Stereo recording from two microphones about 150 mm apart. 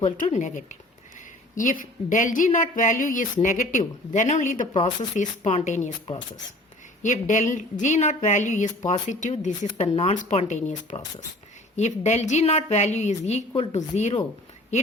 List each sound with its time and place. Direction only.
0.0 s a woman's voice: 55° left (ahead or behind)
5.1 s a woman's voice: 45° left (ahead or behind)
9.7 s a woman's voice: 40° left (ahead or behind)